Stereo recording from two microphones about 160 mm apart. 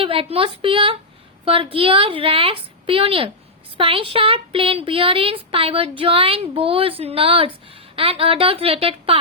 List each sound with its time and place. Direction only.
0.0 s a woman's voice: 35° right (ahead or behind)